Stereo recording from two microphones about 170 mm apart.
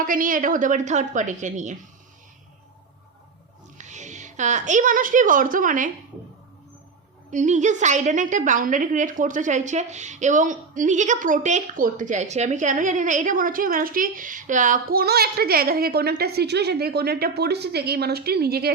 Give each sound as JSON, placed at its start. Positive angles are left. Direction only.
{"t": 0.0, "sound": "a woman's voice", "side_deg": -50}
{"t": 3.8, "sound": "a woman's voice", "side_deg": -45}
{"t": 7.3, "sound": "a woman's voice", "side_deg": -45}